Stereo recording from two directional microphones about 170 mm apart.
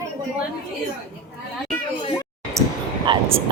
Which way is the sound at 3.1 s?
25° right (ahead or behind).